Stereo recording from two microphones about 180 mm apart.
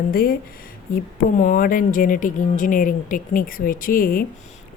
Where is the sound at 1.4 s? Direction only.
50° left (ahead or behind).